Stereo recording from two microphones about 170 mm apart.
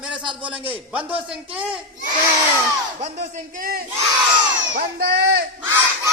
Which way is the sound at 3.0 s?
40° right (ahead or behind).